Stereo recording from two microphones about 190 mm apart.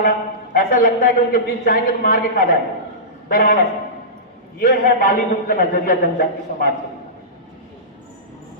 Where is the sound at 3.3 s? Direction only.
50° left (ahead or behind).